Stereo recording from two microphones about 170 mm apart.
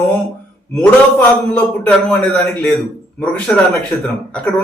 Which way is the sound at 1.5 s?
5° left (ahead or behind).